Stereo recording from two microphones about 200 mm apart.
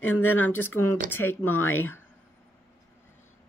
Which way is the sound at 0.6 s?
10° left (ahead or behind).